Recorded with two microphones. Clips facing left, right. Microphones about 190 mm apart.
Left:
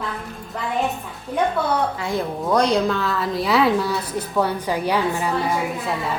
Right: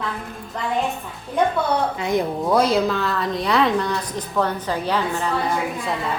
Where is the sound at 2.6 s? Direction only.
5° right (ahead or behind); by 5.3 s 10° left (ahead or behind).